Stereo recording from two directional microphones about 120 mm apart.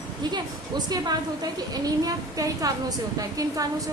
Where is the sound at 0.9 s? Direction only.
35° right (ahead or behind).